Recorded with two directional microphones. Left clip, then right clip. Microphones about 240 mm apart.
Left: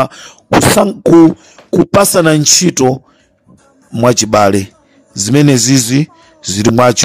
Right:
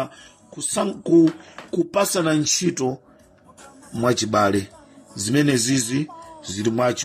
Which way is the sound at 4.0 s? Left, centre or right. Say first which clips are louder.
Left 10 dB; left.